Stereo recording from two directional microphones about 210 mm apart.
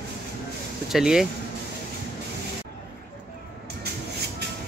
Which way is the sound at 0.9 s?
Centre (ahead or behind).